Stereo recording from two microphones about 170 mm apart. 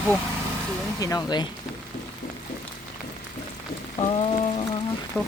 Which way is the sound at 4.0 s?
35° left (ahead or behind).